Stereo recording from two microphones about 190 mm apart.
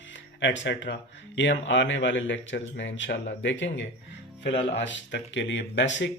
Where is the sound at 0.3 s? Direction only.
70° left (ahead or behind).